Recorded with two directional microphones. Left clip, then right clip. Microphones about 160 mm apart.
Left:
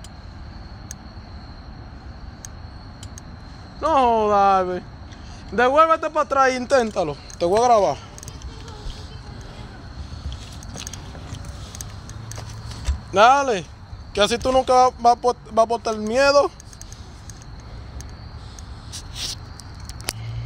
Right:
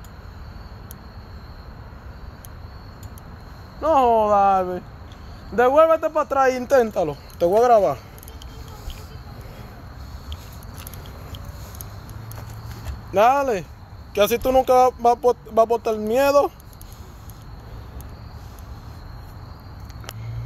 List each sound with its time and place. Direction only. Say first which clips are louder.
3.8 s speech: right 1 dB; 15° right (ahead or behind)
13.1 s speech: left 2 dB; 10° right (ahead or behind); by 16.5 s 30° right (ahead or behind)